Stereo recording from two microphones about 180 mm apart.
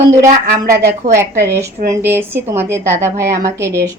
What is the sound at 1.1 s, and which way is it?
A woman's voice, 15° right (ahead or behind).